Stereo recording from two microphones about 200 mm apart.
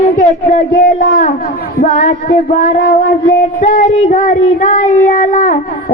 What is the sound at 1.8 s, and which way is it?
Child singing, 40° left (ahead or behind).